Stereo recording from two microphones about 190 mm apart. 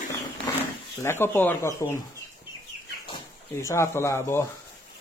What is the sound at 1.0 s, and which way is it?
Speech, 15° left (ahead or behind).